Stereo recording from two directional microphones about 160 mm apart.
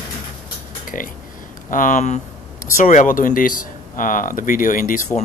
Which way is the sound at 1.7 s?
55° left (ahead or behind).